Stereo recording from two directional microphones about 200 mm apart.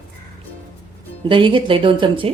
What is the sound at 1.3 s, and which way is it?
Speech, 25° right (ahead or behind).